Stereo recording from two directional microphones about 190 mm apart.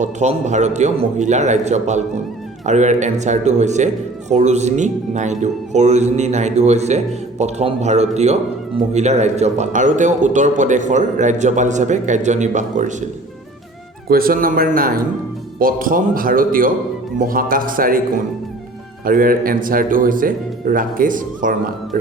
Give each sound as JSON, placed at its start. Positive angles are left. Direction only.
{"t": 0.0, "sound": "a man's voice", "side_deg": -40}
{"t": 14.1, "sound": "speech", "side_deg": -50}